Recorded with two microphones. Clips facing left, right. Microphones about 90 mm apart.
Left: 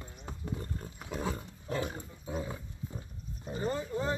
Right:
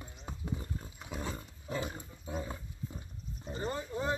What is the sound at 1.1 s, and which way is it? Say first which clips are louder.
Wild animals: left 4 dB; 10° left (ahead or behind).